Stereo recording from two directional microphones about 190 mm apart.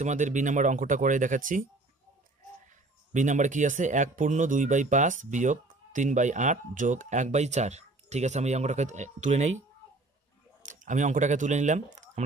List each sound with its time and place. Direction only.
0.0 s speech: 40° right (ahead or behind)
3.1 s speech: 40° right (ahead or behind)
10.6 s speech: 40° right (ahead or behind)